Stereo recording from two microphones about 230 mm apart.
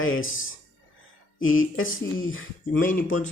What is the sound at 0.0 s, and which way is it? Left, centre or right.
Speech, left.